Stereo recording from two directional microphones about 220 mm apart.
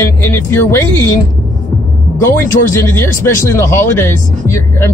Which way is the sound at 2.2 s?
10° left (ahead or behind).